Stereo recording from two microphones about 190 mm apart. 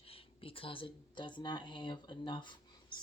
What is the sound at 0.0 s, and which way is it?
Speech, 30° left (ahead or behind).